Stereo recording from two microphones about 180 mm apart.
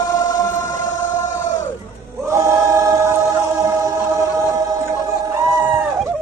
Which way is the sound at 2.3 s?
15° right (ahead or behind).